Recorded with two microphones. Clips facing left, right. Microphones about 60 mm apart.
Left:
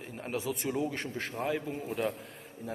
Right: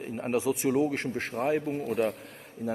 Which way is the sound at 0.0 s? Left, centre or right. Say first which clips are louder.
Right 7 dB; right.